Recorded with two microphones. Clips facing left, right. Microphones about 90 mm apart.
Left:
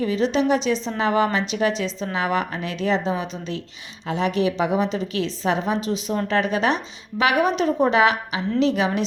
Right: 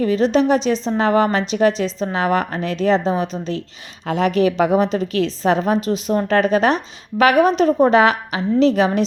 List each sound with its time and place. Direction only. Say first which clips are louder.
0.0 s a woman's voice: right 5 dB; 45° right (ahead or behind)
4.0 s a woman's voice: right 5 dB; 50° right (ahead or behind)